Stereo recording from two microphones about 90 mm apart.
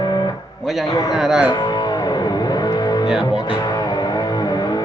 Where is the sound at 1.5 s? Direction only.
55° left (ahead or behind).